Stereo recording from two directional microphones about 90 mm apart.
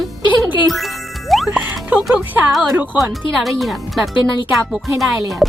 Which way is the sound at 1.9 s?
20° right (ahead or behind).